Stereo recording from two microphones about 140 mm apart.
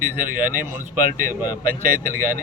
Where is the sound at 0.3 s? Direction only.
75° right (ahead or behind).